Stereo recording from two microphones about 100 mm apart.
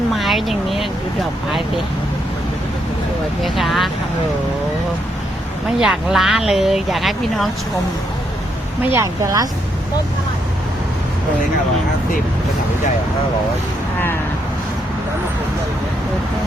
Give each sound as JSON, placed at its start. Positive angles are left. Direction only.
{"t": 0.1, "sound": "a sound", "side_deg": 0}
{"t": 3.4, "sound": "speech", "side_deg": 0}
{"t": 5.8, "sound": "speech", "side_deg": -5}
{"t": 8.9, "sound": "speech", "side_deg": -30}